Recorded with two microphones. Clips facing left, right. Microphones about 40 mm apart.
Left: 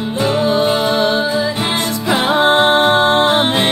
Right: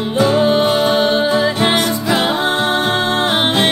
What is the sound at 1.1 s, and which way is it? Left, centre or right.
Music, right.